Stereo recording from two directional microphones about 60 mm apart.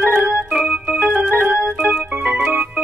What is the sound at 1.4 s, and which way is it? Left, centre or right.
Organ, centre.